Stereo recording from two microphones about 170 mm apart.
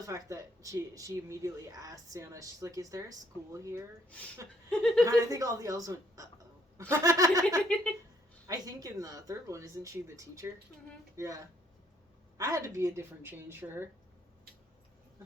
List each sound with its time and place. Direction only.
0.0 s speech: 20° right (ahead or behind)
4.7 s speech: 5° left (ahead or behind)
5.0 s speech: 20° right (ahead or behind)
7.7 s a woman's voice: 5° left (ahead or behind)
8.4 s a woman's voice: 20° right (ahead or behind)
12.4 s a woman's voice: 20° right (ahead or behind)